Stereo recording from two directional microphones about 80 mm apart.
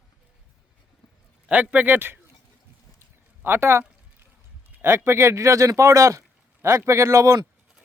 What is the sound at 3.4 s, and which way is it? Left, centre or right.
Speech, right.